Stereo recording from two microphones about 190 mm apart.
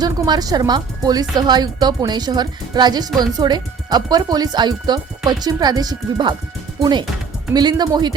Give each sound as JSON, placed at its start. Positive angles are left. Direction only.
{"t": 0.0, "sound": "speech", "side_deg": -20}
{"t": 7.5, "sound": "speech", "side_deg": -20}